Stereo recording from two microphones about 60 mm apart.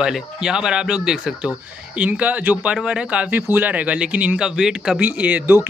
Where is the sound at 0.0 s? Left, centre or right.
Centre.